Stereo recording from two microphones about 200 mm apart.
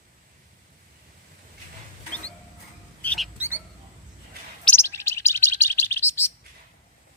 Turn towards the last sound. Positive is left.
turn(degrees=10)  # may be behind; listen again after turning